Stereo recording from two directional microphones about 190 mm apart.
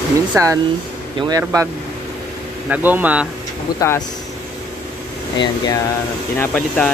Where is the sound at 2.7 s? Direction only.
10° right (ahead or behind).